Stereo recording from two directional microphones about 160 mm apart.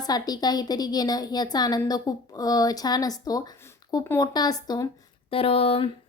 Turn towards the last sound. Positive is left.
turn(degrees=35)  # may be behind; listen again after turning